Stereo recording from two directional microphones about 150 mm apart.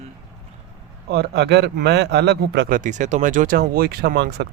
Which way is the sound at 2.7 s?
55° right (ahead or behind).